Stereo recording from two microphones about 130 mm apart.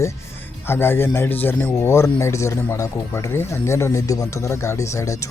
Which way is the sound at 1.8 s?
20° left (ahead or behind).